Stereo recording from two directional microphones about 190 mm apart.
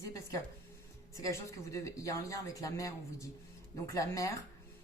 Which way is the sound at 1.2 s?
15° left (ahead or behind).